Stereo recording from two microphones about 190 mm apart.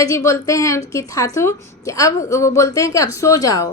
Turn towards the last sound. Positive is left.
turn(degrees=20)  # may be behind; listen again after turning